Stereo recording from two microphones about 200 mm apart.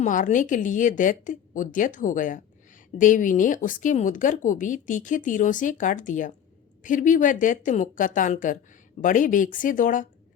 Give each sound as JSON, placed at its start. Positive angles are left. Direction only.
{"t": 0.0, "sound": "speech", "side_deg": 40}